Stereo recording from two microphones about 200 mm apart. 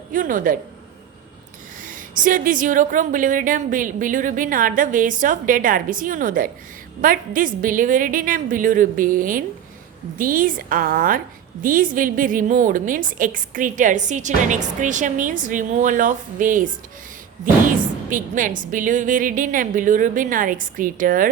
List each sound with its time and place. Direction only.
0.1 s a woman's voice: 40° right (ahead or behind)
1.8 s a woman's voice: 40° right (ahead or behind)